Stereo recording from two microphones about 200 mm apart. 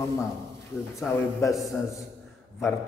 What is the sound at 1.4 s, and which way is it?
Speech, 15° left (ahead or behind).